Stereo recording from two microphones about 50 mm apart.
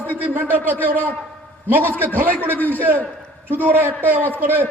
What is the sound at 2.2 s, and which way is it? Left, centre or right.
Speech, right.